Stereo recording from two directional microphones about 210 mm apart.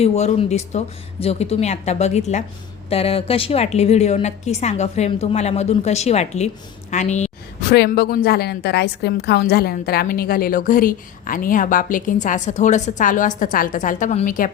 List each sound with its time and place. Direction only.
0.0 s a woman's voice: 30° left (ahead or behind)
7.6 s a woman's voice: 50° left (ahead or behind)